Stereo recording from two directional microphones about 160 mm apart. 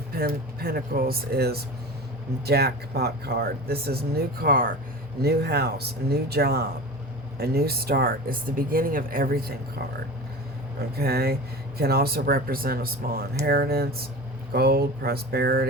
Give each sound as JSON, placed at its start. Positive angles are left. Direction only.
{"t": 0.1, "sound": "speech", "side_deg": -70}
{"t": 5.2, "sound": "speech", "side_deg": -80}
{"t": 10.9, "sound": "speech", "side_deg": -75}